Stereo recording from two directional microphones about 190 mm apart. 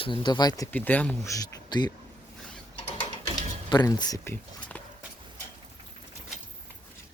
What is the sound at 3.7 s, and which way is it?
Speech, 20° left (ahead or behind).